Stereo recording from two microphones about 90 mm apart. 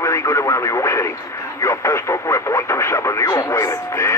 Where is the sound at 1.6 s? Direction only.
35° left (ahead or behind).